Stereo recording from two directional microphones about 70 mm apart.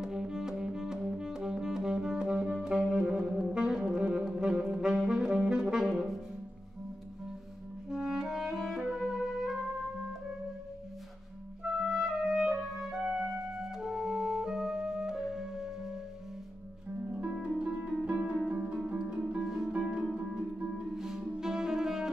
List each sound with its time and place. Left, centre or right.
0.0 s music: centre
2.5 s saxophone: centre
7.9 s music: centre
11.9 s music: centre
18.0 s music: centre